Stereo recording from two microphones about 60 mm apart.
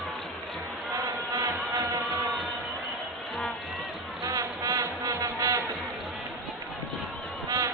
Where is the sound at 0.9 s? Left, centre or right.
Right.